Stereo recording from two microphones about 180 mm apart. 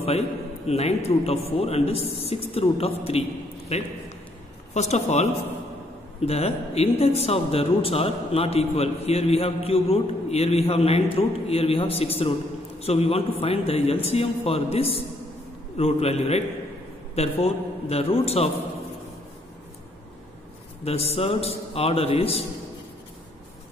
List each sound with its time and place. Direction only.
0.7 s speech: 35° left (ahead or behind)
20.8 s speech: 35° left (ahead or behind)